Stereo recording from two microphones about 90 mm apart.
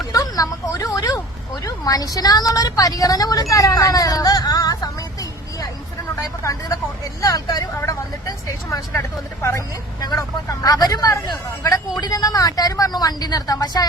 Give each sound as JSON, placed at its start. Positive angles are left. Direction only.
{"t": 0.0, "sound": "a sound", "side_deg": 40}
{"t": 1.6, "sound": "speech", "side_deg": 45}
{"t": 6.1, "sound": "speech", "side_deg": 35}
{"t": 8.7, "sound": "speech", "side_deg": 30}